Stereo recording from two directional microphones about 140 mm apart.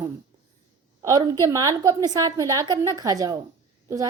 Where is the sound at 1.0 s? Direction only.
25° right (ahead or behind).